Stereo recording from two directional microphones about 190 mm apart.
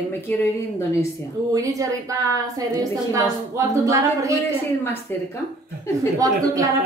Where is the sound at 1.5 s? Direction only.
15° right (ahead or behind).